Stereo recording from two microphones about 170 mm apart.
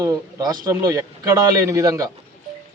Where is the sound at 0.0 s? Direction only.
20° right (ahead or behind).